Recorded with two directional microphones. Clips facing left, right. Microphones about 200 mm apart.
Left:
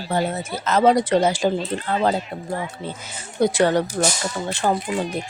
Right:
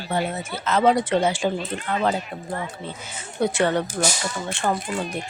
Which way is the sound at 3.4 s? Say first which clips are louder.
Left 3 dB; 35° left (ahead or behind).